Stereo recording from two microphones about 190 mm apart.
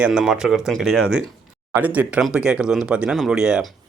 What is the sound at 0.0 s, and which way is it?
Speech, 5° right (ahead or behind).